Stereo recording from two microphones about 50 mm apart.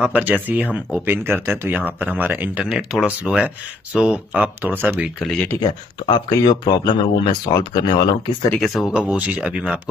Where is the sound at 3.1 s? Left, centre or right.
Right.